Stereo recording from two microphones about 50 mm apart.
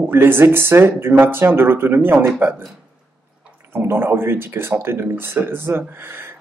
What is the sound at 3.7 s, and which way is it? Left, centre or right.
A man's voice, right.